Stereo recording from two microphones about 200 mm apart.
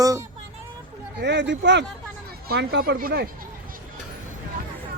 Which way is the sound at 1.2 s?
60° right (ahead or behind).